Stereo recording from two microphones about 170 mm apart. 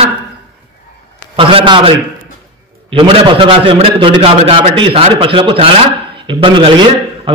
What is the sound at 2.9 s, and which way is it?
A man's voice, 30° right (ahead or behind).